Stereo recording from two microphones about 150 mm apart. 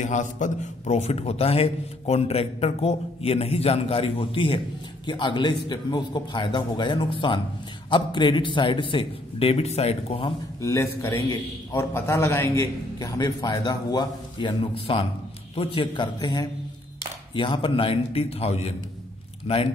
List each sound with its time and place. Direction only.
0.0 s a man's voice: 50° left (ahead or behind)
10.6 s a man's voice: 20° left (ahead or behind); by 19.7 s 40° left (ahead or behind)